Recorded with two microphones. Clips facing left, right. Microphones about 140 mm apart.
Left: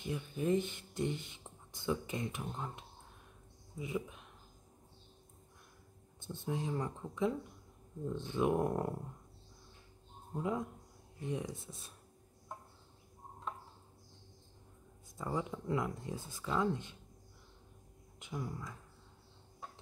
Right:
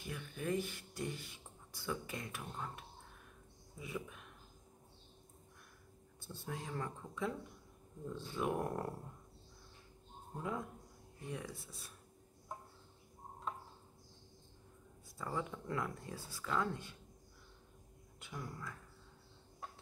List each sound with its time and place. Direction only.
0.0 s speech: 20° left (ahead or behind)
6.2 s speech: 20° left (ahead or behind)
10.3 s speech: 20° left (ahead or behind)
15.1 s speech: 20° left (ahead or behind)
18.2 s speech: 20° left (ahead or behind)